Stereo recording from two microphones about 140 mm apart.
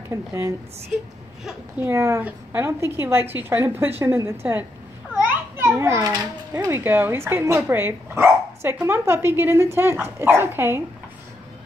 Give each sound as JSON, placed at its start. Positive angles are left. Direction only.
{"t": 0.1, "sound": "speech", "side_deg": -20}
{"t": 1.4, "sound": "a woman's voice", "side_deg": -5}
{"t": 1.9, "sound": "speech", "side_deg": -15}
{"t": 5.1, "sound": "children playing", "side_deg": -15}
{"t": 6.5, "sound": "speech", "side_deg": -20}